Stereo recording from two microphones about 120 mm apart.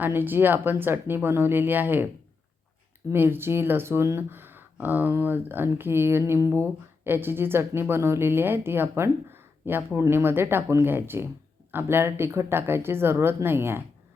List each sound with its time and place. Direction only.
0.0 s speech: 15° right (ahead or behind)
3.1 s speech: 20° right (ahead or behind)